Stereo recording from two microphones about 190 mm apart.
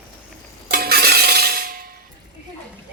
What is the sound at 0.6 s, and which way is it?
Music, 55° right (ahead or behind).